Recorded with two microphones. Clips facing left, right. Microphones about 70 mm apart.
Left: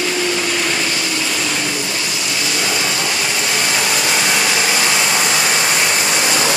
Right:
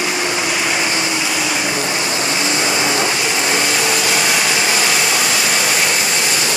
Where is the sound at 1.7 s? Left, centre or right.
Right.